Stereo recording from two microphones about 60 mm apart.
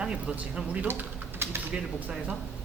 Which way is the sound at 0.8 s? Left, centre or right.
Right.